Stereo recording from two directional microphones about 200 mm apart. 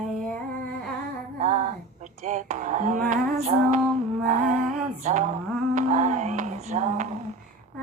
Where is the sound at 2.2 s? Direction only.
35° right (ahead or behind).